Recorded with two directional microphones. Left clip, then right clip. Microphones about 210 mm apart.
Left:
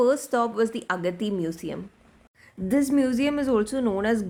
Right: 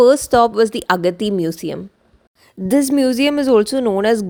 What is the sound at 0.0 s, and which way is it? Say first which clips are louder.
Speech: right 11 dB; 35° right (ahead or behind).